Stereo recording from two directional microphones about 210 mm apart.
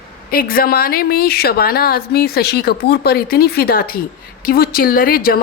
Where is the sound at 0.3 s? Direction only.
45° left (ahead or behind).